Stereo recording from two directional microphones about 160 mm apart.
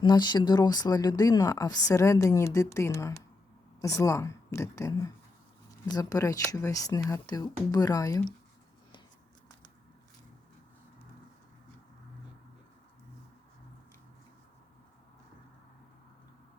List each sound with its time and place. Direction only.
0.0 s speech: 25° left (ahead or behind)